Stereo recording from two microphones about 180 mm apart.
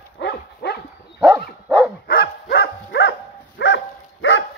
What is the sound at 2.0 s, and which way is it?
Dog, 60° left (ahead or behind).